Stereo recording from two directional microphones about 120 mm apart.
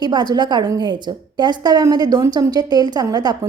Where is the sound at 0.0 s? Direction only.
40° right (ahead or behind).